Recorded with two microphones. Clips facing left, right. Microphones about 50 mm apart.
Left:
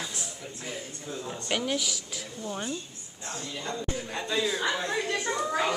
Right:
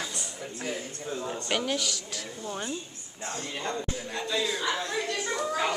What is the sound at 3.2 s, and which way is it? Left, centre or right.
Speech, right.